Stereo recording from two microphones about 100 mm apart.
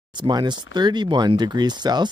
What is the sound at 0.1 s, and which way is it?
Speech, 45° right (ahead or behind).